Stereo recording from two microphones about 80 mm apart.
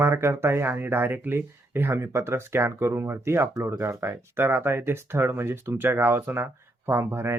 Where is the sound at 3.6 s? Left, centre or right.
Right.